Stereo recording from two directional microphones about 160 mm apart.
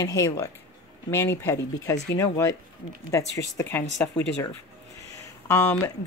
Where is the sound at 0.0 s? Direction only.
20° left (ahead or behind).